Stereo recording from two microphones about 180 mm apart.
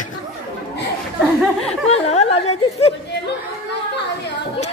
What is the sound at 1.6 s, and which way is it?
Speech, 35° left (ahead or behind).